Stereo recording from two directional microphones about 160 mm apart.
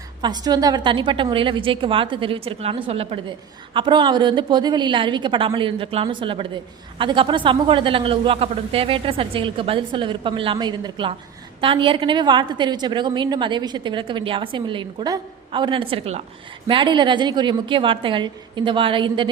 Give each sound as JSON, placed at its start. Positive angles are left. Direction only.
{"t": 0.2, "sound": "a woman's voice", "side_deg": -25}